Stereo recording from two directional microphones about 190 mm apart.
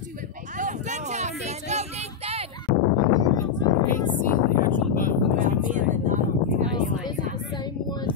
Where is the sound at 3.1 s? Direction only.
20° left (ahead or behind).